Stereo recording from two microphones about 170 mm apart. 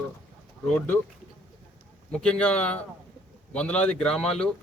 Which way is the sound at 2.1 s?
5° left (ahead or behind).